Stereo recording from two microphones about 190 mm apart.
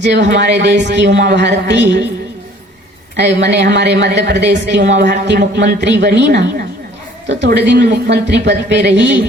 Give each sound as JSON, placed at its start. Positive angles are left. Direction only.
{"t": 0.0, "sound": "speech", "side_deg": -65}
{"t": 3.2, "sound": "speech", "side_deg": -65}